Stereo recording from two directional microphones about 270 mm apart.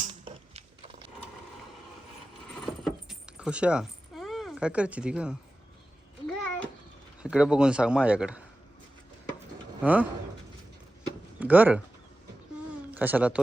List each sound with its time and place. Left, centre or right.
0.0 s a sound: right
2.5 s keys jangling: centre
6.2 s a sound: centre
7.2 s speech: centre
9.8 s speech: centre
11.3 s speech: centre
12.9 s speech: centre